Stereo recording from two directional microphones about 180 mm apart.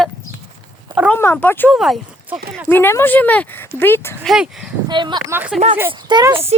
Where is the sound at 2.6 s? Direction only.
10° left (ahead or behind).